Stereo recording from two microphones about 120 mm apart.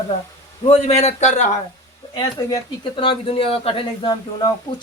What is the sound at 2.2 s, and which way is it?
Speech, 35° left (ahead or behind).